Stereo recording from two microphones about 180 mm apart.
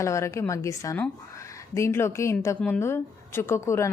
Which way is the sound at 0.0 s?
15° left (ahead or behind).